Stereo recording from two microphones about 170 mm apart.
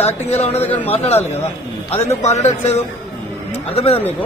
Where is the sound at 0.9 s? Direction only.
35° left (ahead or behind).